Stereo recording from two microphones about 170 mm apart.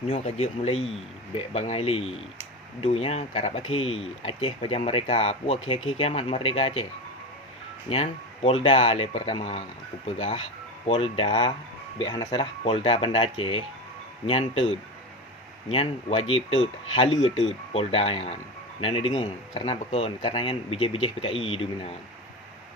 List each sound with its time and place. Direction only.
0.1 s speech: 35° left (ahead or behind)
7.9 s speech: 35° left (ahead or behind)